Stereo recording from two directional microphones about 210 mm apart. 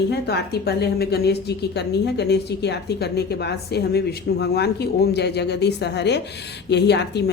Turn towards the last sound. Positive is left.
turn(degrees=55)  # may be behind; listen again after turning